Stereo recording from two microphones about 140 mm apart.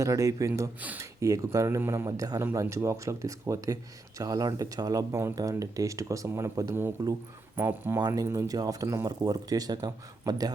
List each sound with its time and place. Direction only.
0.0 s speech: 20° right (ahead or behind)